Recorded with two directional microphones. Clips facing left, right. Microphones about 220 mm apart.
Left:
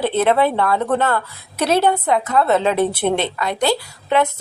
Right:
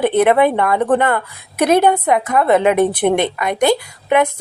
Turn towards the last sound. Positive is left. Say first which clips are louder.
# right 3 dB
turn(degrees=-15)  # may be behind; listen again after turning